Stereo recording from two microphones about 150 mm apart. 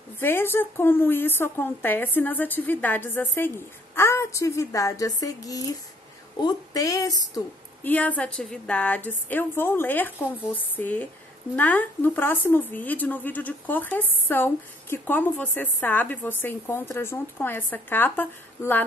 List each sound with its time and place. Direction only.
0.2 s a woman's voice: 15° left (ahead or behind)
7.8 s speech: 10° left (ahead or behind)